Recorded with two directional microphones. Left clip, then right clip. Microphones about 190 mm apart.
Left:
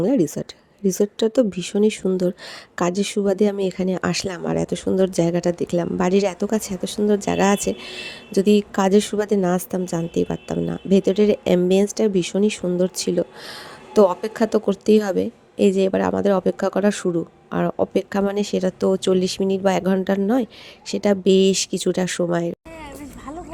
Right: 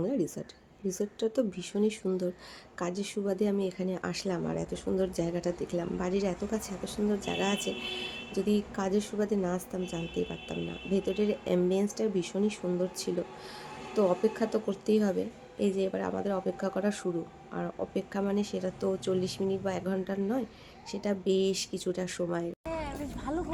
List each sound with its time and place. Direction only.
0.0 s speech: 45° left (ahead or behind)